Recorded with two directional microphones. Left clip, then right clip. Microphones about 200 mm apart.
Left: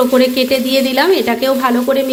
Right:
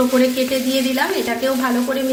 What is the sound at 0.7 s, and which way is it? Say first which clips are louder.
A woman's voice: left 7 dB; 55° left (ahead or behind).